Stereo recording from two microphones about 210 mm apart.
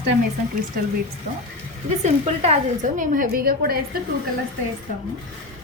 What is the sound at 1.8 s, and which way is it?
Speech, 30° right (ahead or behind).